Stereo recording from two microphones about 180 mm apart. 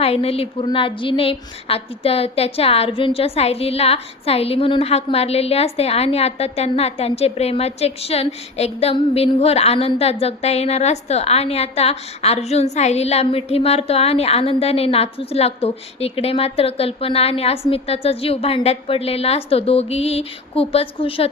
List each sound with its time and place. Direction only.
0.0 s a woman's voice: 35° left (ahead or behind)